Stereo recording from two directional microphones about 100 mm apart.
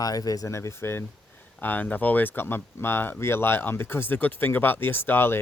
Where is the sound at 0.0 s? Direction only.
40° left (ahead or behind).